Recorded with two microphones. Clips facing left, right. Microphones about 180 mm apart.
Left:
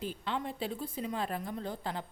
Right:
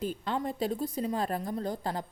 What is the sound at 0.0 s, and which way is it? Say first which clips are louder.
Speech: right 4 dB; 45° right (ahead or behind).